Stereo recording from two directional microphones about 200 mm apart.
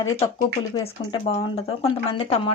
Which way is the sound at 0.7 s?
25° left (ahead or behind).